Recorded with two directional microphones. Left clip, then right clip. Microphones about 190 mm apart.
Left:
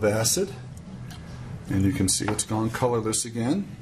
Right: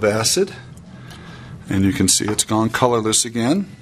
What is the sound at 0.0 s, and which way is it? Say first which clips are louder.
Speech: right 6 dB; 25° right (ahead or behind).